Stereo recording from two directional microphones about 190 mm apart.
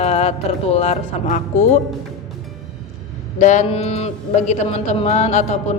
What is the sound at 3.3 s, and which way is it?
Speech, 40° left (ahead or behind).